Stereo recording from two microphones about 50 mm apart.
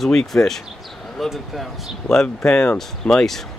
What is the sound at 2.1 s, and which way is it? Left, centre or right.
Speech, centre.